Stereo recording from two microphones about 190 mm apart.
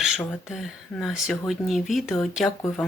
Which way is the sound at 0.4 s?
Centre (ahead or behind).